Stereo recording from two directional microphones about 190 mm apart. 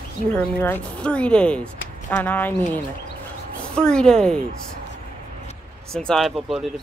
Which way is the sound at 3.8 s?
5° left (ahead or behind).